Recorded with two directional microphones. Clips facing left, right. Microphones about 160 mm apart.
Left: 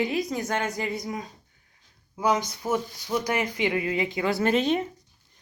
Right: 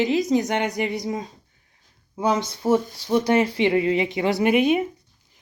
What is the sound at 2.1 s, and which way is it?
Speech, 25° right (ahead or behind).